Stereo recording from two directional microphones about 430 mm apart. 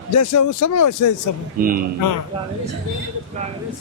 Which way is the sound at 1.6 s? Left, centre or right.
Centre.